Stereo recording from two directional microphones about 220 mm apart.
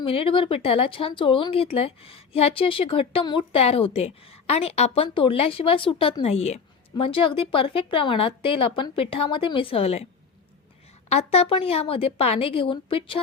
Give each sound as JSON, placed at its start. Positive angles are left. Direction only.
{"t": 0.0, "sound": "speech", "side_deg": 25}
{"t": 11.1, "sound": "speech", "side_deg": 30}